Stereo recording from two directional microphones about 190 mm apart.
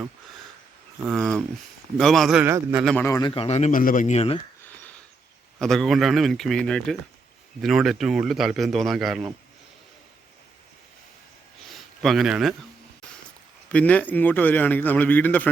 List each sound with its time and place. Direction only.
1.0 s a man's voice: centre (ahead or behind)
2.8 s a man's voice: 10° left (ahead or behind)
3.2 s speech: 25° left (ahead or behind)
5.5 s a man's voice: centre (ahead or behind)
11.7 s a sound: centre (ahead or behind)
13.7 s a man's voice: 5° left (ahead or behind)